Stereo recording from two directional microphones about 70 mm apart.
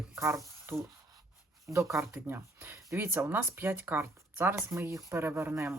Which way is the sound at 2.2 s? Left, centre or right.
Right.